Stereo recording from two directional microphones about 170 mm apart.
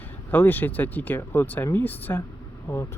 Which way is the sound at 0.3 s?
10° left (ahead or behind).